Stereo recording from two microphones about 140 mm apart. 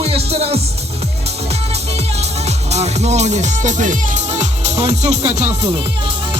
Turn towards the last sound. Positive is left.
turn(degrees=-50)  # may be behind; listen again after turning